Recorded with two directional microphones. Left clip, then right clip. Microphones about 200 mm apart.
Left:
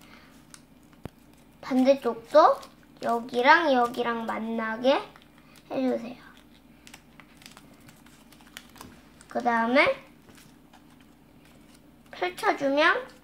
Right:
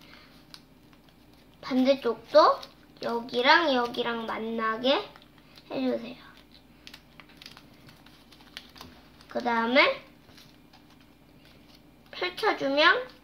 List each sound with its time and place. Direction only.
1.6 s speech: 15° left (ahead or behind)
6.8 s a sound: 5° left (ahead or behind)
9.3 s speech: 10° left (ahead or behind)
12.1 s speech: 10° left (ahead or behind)